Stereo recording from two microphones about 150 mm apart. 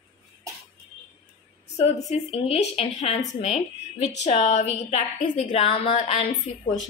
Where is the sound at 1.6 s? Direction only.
45° left (ahead or behind).